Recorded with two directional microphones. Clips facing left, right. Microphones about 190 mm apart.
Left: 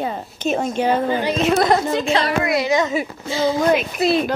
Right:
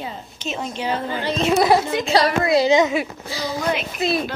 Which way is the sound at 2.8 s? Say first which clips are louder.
Right 2 dB; 5° right (ahead or behind).